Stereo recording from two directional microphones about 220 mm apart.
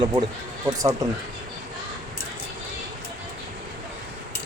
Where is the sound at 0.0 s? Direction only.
20° right (ahead or behind).